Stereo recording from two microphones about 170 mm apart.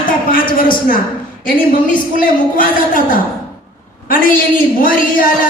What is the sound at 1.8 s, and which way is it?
A woman's voice, 55° left (ahead or behind).